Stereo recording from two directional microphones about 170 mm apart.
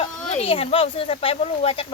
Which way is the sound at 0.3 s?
35° left (ahead or behind).